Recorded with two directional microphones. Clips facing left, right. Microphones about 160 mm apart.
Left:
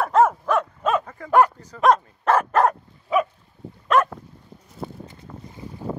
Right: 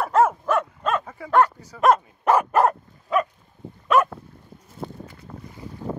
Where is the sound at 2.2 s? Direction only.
10° right (ahead or behind).